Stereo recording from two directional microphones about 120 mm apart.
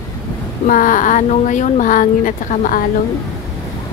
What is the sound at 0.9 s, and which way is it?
Speech, 90° left.